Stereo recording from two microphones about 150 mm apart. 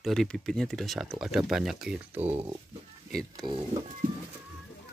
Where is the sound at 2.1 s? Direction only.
45° right (ahead or behind).